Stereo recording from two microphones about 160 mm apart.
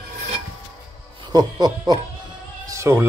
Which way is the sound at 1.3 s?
25° right (ahead or behind).